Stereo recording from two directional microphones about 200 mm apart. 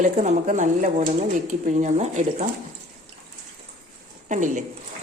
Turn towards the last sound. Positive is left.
turn(degrees=-40)  # may be behind; listen again after turning